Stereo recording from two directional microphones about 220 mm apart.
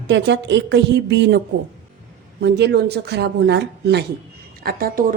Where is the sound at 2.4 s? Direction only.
50° right (ahead or behind).